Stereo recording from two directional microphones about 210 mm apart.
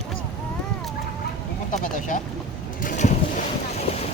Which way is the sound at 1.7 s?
40° left (ahead or behind).